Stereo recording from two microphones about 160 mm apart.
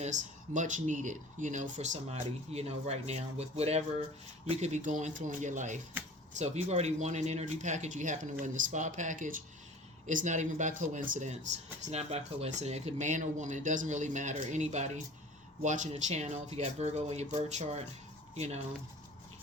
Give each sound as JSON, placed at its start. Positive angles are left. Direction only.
{"t": 0.0, "sound": "speech", "side_deg": -50}
{"t": 11.9, "sound": "speech", "side_deg": -40}